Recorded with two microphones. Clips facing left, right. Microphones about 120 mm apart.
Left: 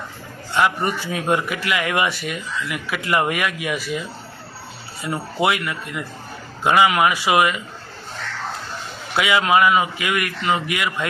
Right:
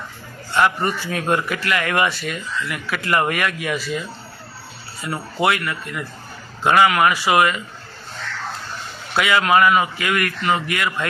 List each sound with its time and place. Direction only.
0.5 s speech: 10° left (ahead or behind)
5.0 s speech: 15° left (ahead or behind)
9.1 s speech: 15° left (ahead or behind)